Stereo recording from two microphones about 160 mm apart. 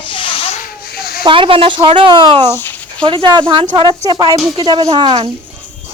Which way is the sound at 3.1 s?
30° right (ahead or behind).